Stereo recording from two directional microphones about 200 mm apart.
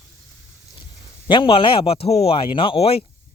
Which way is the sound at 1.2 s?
25° left (ahead or behind).